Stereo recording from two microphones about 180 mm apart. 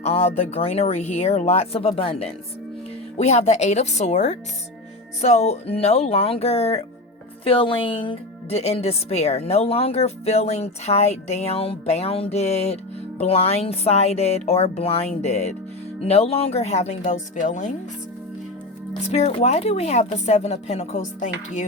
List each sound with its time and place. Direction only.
0.0 s speech: 35° left (ahead or behind)
19.1 s speech: 40° left (ahead or behind)